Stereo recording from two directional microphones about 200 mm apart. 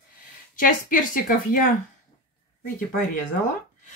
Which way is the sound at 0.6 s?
40° left (ahead or behind).